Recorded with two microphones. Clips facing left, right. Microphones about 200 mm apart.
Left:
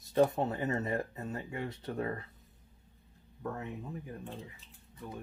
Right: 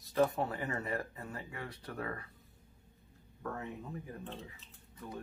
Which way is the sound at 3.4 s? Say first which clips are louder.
Left 2 dB; 20° left (ahead or behind).